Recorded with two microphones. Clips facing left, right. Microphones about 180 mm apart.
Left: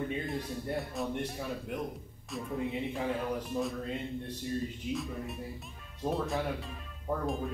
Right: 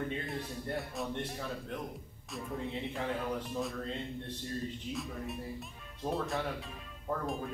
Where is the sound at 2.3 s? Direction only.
Centre (ahead or behind).